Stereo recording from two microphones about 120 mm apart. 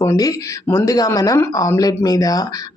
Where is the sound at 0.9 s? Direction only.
30° left (ahead or behind).